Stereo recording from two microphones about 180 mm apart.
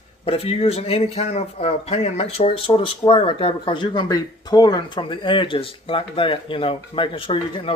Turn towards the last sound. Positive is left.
turn(degrees=30)  # may be behind; listen again after turning